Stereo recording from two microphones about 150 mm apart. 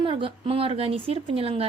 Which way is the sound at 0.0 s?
35° right (ahead or behind).